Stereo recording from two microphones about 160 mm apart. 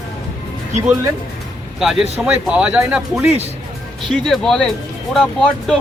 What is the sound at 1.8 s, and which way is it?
Speech, 5° right (ahead or behind).